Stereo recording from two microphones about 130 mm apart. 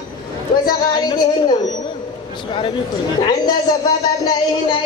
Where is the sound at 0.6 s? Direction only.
35° left (ahead or behind).